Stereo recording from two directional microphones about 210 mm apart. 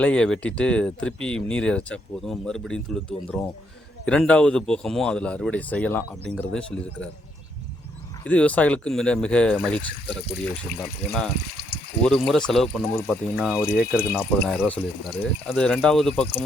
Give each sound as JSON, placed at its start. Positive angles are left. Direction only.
{"t": 0.0, "sound": "a man's voice", "side_deg": 5}
{"t": 8.2, "sound": "a man's voice", "side_deg": 5}